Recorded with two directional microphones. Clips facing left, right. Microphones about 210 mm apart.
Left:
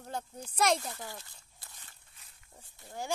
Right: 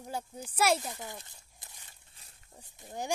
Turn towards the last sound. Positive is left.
turn(degrees=-20)  # may be behind; listen again after turning